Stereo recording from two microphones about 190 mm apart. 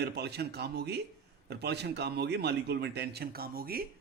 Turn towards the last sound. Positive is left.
turn(degrees=-50)  # may be behind; listen again after turning